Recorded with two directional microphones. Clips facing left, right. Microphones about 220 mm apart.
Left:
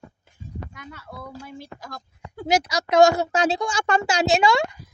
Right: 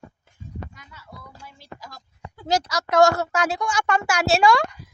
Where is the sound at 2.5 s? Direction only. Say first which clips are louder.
Left 2 dB; 10° left (ahead or behind).